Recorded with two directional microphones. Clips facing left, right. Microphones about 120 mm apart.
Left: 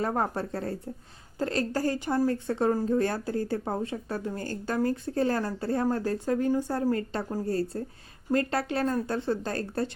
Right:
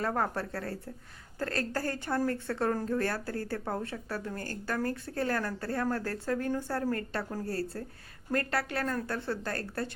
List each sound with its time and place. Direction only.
0.0 s speech: 20° left (ahead or behind)